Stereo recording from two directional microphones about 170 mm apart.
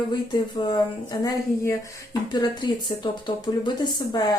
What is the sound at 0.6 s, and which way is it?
Speech, 30° left (ahead or behind).